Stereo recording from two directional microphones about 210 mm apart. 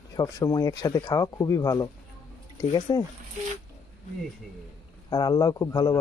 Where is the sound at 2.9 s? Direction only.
20° left (ahead or behind).